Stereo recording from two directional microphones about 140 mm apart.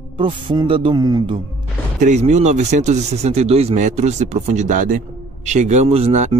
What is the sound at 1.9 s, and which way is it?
Speech, 60° right (ahead or behind).